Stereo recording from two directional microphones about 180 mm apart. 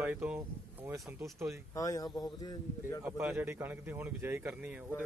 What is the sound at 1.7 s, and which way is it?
Speech, 20° left (ahead or behind).